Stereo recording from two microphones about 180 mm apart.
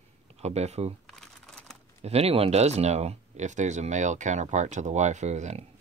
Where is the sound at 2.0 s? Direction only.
35° right (ahead or behind).